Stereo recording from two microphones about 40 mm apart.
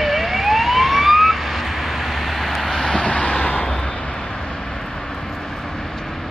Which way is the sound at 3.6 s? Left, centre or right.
Left.